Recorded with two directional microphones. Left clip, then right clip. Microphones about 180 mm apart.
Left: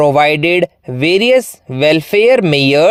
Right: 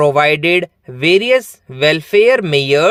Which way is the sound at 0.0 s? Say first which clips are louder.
Left 2 dB; 35° left (ahead or behind).